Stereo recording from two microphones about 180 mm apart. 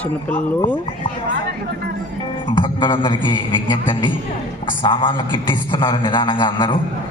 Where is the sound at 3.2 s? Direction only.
25° left (ahead or behind).